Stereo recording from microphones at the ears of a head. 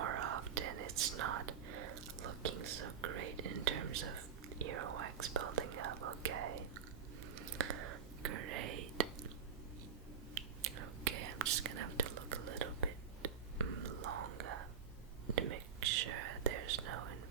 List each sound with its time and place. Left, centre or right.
0.0 s whispering: right
10.3 s whispering: right